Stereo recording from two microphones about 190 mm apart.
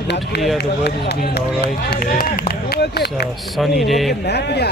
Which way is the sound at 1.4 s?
50° left (ahead or behind).